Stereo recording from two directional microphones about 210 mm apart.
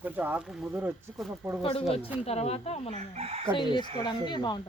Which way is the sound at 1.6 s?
25° left (ahead or behind).